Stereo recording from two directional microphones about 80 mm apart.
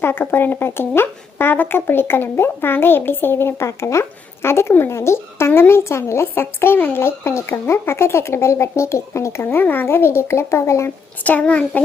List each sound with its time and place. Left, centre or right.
0.0 s speech: left
11.2 s speech: centre